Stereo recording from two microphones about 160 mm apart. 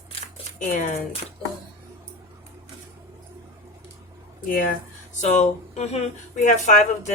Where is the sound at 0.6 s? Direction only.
55° left (ahead or behind).